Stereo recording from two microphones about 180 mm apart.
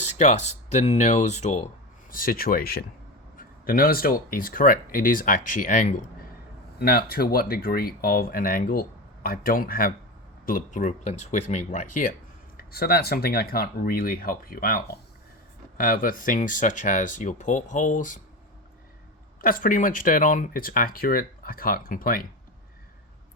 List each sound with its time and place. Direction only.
0.0 s speech: 40° left (ahead or behind)
6.7 s speech: 60° left (ahead or behind)
12.5 s speech: 60° left (ahead or behind)
19.4 s speech: 50° left (ahead or behind)